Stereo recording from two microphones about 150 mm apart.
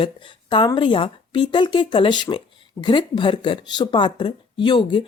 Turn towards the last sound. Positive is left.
turn(degrees=30)  # may be behind; listen again after turning